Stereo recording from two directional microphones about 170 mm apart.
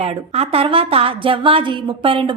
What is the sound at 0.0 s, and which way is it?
A woman's voice, 35° right (ahead or behind).